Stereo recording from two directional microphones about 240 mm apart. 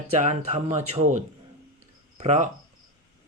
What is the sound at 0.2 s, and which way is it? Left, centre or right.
Speech, right.